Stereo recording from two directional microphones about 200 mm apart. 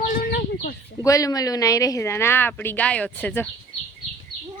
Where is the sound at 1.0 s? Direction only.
15° left (ahead or behind).